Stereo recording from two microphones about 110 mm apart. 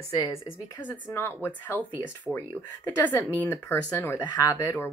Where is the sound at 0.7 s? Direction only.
20° left (ahead or behind).